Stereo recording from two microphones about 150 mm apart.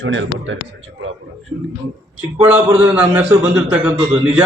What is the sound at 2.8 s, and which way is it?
Speech, 15° right (ahead or behind).